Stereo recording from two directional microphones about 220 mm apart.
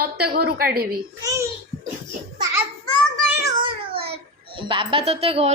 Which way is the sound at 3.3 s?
15° right (ahead or behind).